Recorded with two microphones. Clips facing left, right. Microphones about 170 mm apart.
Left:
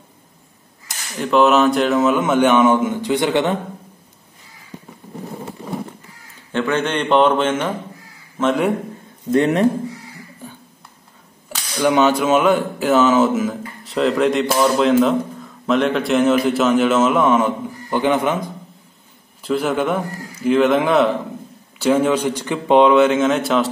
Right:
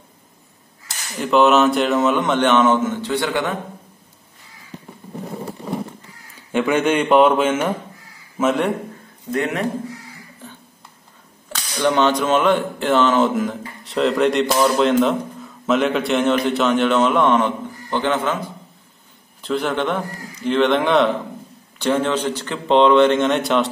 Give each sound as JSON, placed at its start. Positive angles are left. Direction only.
{"t": 1.1, "sound": "a man's voice", "side_deg": 0}
{"t": 6.5, "sound": "a man's voice", "side_deg": -10}
{"t": 9.3, "sound": "speech", "side_deg": 30}
{"t": 10.4, "sound": "a sound", "side_deg": 10}
{"t": 11.4, "sound": "a man's voice", "side_deg": 10}
{"t": 19.4, "sound": "a man's voice", "side_deg": 5}